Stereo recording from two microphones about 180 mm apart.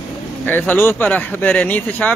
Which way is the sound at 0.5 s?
10° left (ahead or behind).